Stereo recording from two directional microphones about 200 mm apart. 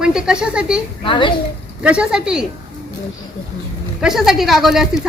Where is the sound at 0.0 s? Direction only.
5° right (ahead or behind).